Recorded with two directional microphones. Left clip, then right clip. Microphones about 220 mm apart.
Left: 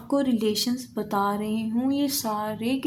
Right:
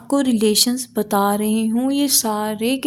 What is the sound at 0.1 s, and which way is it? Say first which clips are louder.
Speech: right 7 dB; 50° right (ahead or behind).